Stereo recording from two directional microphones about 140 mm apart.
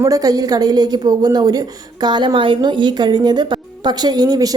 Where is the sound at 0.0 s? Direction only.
25° right (ahead or behind).